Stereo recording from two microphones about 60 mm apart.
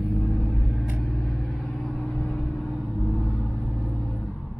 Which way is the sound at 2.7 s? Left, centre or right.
Right.